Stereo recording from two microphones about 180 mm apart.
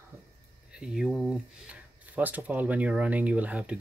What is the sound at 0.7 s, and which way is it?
Speech, 5° right (ahead or behind).